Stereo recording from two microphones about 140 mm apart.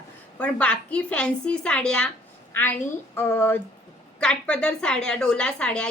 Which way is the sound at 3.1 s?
15° left (ahead or behind).